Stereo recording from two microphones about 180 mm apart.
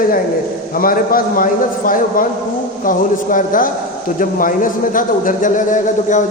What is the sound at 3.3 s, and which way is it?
A man's voice, 50° left (ahead or behind).